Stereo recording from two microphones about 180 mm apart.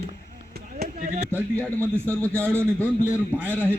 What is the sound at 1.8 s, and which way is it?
Speech, 10° left (ahead or behind).